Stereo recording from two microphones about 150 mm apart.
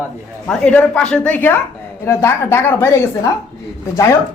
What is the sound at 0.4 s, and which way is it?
Speech, 10° left (ahead or behind).